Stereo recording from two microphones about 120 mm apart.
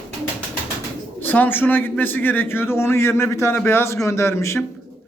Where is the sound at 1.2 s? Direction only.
15° left (ahead or behind).